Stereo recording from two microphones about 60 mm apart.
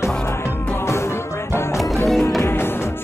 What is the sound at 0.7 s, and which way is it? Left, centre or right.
Music, left.